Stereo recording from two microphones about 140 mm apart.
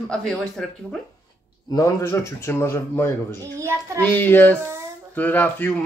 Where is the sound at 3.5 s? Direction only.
20° right (ahead or behind).